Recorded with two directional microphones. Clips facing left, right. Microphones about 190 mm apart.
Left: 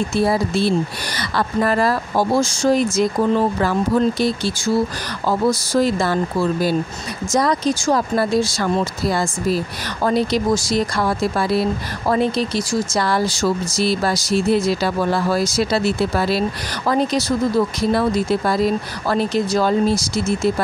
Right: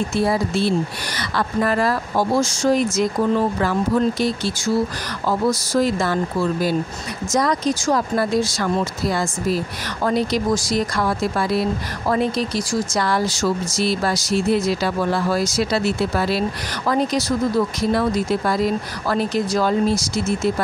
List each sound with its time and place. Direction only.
0.1 s speech: 35° left (ahead or behind)